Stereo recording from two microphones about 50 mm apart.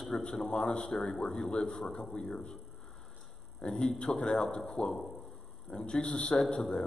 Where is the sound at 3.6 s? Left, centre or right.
Centre.